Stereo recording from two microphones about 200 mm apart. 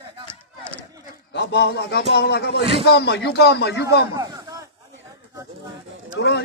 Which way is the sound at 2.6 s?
30° right (ahead or behind).